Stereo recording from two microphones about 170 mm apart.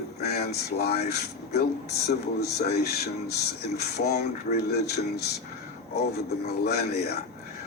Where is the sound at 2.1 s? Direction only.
70° left (ahead or behind).